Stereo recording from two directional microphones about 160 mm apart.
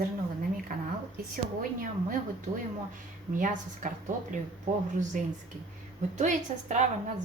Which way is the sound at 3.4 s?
55° right (ahead or behind).